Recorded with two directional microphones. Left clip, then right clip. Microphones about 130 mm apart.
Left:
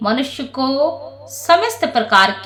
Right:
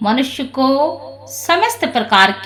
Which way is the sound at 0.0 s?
10° right (ahead or behind).